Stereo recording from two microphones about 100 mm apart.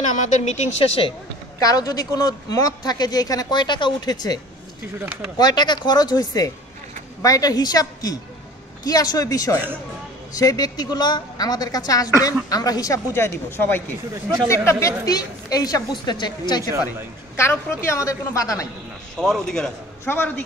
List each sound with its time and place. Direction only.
0.7 s speech: 90° left
1.6 s speech: 40° left (ahead or behind)
5.4 s speech: 45° left (ahead or behind)
13.1 s speech: 25° left (ahead or behind)
14.1 s speech: 40° right (ahead or behind)
14.5 s speech: 30° left (ahead or behind)
17.4 s speech: 30° left (ahead or behind)
19.1 s speech: 5° left (ahead or behind)
20.1 s speech: 20° left (ahead or behind)